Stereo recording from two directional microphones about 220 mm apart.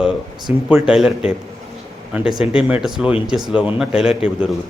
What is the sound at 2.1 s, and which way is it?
A man's voice, 5° right (ahead or behind).